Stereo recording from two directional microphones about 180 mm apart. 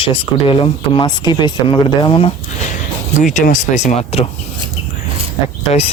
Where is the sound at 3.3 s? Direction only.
45° left (ahead or behind).